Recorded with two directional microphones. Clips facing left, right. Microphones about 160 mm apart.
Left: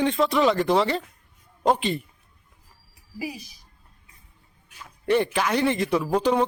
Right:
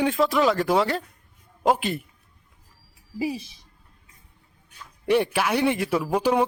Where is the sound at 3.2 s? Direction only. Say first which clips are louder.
Right 6 dB; 25° right (ahead or behind).